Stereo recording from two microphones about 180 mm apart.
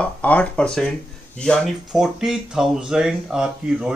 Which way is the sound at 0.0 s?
10° left (ahead or behind).